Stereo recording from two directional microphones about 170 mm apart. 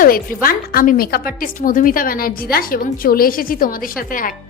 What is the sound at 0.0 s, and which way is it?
A woman's voice, 55° left (ahead or behind).